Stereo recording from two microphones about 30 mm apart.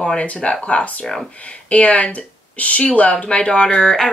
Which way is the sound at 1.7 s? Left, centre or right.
Left.